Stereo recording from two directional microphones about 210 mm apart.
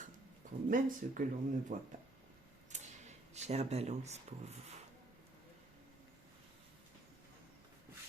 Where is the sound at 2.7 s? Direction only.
35° right (ahead or behind).